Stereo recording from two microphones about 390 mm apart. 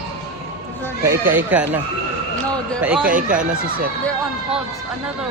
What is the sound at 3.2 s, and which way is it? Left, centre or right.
Speech, centre.